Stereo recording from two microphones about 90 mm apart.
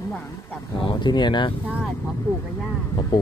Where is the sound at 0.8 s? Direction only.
65° left (ahead or behind).